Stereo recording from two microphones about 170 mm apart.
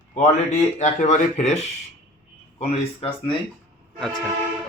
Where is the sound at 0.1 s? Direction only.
40° left (ahead or behind).